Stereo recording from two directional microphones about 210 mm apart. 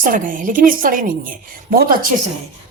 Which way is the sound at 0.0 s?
40° right (ahead or behind).